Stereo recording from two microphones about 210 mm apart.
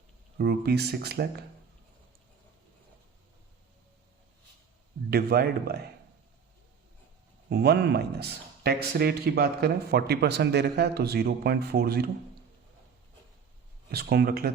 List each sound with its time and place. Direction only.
0.3 s a man's voice: 50° right (ahead or behind)
5.1 s a man's voice: 50° right (ahead or behind)
7.5 s a man's voice: 50° right (ahead or behind)
13.9 s a man's voice: 50° right (ahead or behind)